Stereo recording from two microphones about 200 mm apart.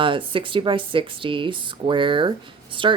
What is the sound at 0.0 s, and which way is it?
Speech, 25° right (ahead or behind).